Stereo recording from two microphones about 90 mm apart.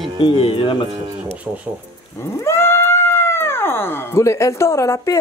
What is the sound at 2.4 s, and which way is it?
Speech, 25° left (ahead or behind).